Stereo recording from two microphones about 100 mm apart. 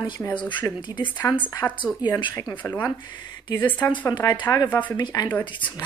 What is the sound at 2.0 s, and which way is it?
Speech, 50° left (ahead or behind).